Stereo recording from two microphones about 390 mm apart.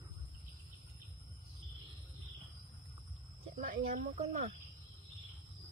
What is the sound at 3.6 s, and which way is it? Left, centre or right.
Speech, right.